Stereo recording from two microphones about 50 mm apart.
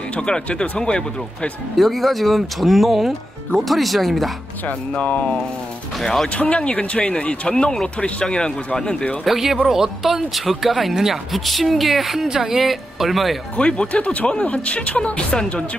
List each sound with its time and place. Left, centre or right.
0.1 s speech: left
1.8 s speech: centre
4.6 s speech: left
6.2 s speech: left
9.2 s speech: centre
13.6 s speech: left